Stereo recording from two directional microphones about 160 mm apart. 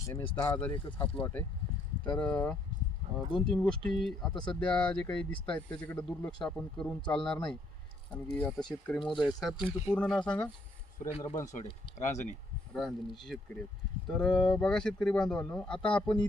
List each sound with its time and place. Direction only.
0.0 s speech: 15° left (ahead or behind)
0.3 s speech: 25° left (ahead or behind)
1.1 s a man's voice: 10° left (ahead or behind)
9.0 s speech: 30° left (ahead or behind)
9.2 s a man's voice: centre (ahead or behind)
11.5 s speech: 45° left (ahead or behind)
12.7 s a man's voice: centre (ahead or behind)